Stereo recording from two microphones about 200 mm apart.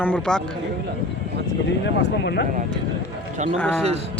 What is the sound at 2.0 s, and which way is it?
Speech, 55° left (ahead or behind).